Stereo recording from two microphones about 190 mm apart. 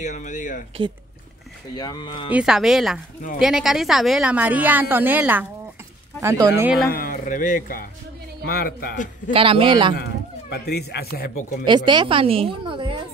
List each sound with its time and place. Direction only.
0.0 s speech: 40° left (ahead or behind)
1.8 s speech: 20° left (ahead or behind)
2.3 s a woman's voice: 5° right (ahead or behind)
6.9 s a man's voice: 45° left (ahead or behind)
9.3 s speech: 30° right (ahead or behind)
10.5 s speech: 60° left (ahead or behind)
11.6 s speech: 25° right (ahead or behind)